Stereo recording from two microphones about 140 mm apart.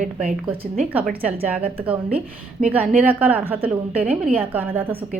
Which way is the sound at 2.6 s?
10° right (ahead or behind).